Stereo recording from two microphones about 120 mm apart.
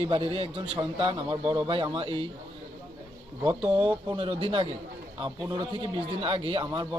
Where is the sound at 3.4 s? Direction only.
50° right (ahead or behind).